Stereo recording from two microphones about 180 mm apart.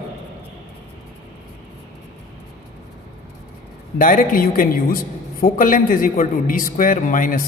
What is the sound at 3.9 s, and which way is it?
A woman's voice, 50° left (ahead or behind).